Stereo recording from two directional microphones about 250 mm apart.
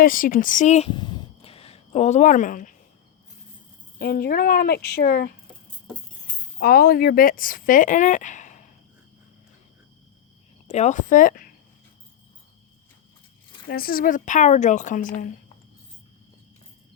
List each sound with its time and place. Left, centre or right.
0.0 s speech: left
3.9 s speech: left
6.6 s speech: left
10.7 s speech: left
13.7 s speech: left